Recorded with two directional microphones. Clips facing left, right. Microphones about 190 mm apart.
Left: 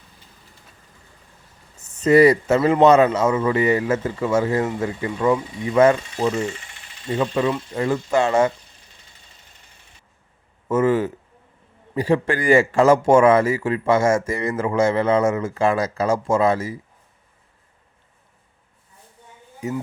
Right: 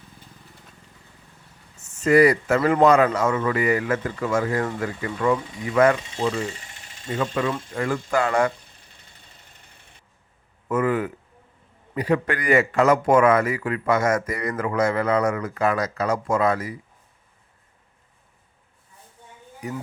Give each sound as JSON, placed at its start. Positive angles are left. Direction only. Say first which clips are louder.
{"t": 2.0, "sound": "a man's voice", "louder": "left 3 dB", "side_deg": 25}
{"t": 6.6, "sound": "a sound", "louder": "even", "side_deg": -40}
{"t": 7.4, "sound": "a man's voice", "louder": "left 4 dB", "side_deg": 25}
{"t": 8.5, "sound": "a sound", "louder": "even", "side_deg": -55}
{"t": 10.7, "sound": "a man's voice", "louder": "left 4 dB", "side_deg": 25}
{"t": 19.6, "sound": "a man's voice", "louder": "left 5 dB", "side_deg": 25}